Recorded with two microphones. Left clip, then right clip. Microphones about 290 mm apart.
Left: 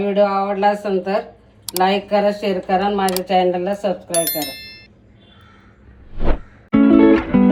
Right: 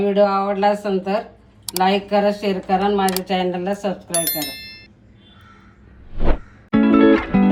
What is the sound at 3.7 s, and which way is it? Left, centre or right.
Speech, centre.